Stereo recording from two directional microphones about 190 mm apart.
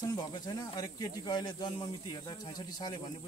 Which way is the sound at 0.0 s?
20° left (ahead or behind).